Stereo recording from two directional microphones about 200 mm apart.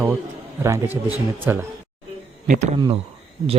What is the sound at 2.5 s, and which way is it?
Speech, 35° right (ahead or behind).